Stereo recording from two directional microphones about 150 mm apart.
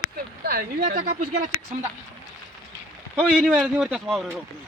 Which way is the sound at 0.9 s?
70° right (ahead or behind).